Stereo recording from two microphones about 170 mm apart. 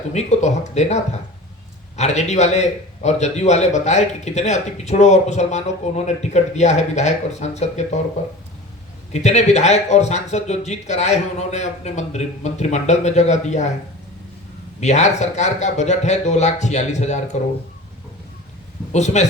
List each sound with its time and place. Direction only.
0.1 s a man's voice: 40° left (ahead or behind)
9.1 s a man's voice: 40° left (ahead or behind)
14.8 s speech: 40° left (ahead or behind)
18.9 s speech: 40° left (ahead or behind)